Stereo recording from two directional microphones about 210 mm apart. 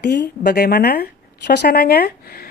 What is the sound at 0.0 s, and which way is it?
Speech, 50° left (ahead or behind).